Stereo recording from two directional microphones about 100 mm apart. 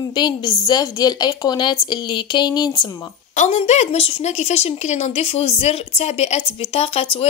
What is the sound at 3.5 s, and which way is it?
A woman's voice, 90° left.